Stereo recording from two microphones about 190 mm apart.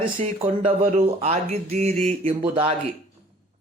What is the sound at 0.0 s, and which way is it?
Speech, 30° right (ahead or behind).